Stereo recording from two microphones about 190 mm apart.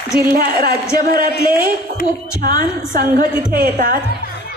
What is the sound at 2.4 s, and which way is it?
A woman's voice, 50° right (ahead or behind).